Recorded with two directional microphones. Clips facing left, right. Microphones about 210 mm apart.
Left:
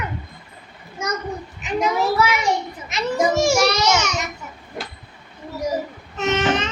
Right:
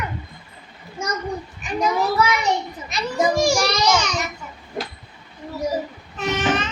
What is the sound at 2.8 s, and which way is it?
A child's voice, 25° left (ahead or behind).